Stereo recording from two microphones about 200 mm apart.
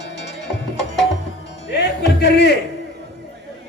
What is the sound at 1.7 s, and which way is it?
Speech, 55° left (ahead or behind).